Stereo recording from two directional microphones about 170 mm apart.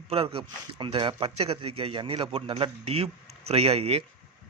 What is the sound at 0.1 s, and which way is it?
Speech, 35° right (ahead or behind).